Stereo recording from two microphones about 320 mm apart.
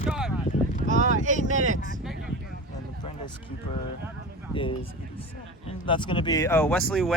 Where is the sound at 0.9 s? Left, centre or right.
Right.